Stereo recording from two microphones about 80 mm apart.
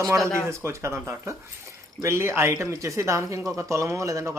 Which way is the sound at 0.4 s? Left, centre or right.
Right.